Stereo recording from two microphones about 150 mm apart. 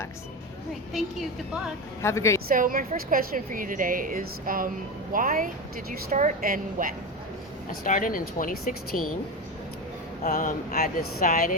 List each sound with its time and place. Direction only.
2.0 s a woman's voice: 20° left (ahead or behind)
2.5 s a woman's voice: 70° right (ahead or behind)
6.1 s a woman's voice: 55° right (ahead or behind); by 6.9 s 70° right (ahead or behind)
7.9 s speech: 65° left (ahead or behind)
10.2 s speech: 75° left (ahead or behind)